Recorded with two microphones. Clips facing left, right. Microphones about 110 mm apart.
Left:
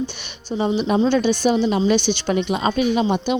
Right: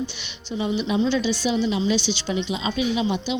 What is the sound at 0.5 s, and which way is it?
A woman's voice, 40° left (ahead or behind).